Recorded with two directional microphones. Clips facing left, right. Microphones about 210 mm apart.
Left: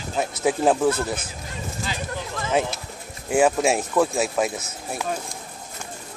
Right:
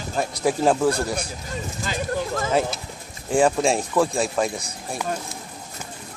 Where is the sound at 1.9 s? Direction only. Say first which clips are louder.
Right 8 dB; 45° right (ahead or behind).